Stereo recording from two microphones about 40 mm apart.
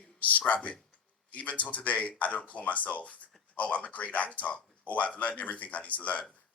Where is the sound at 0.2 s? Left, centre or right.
Left.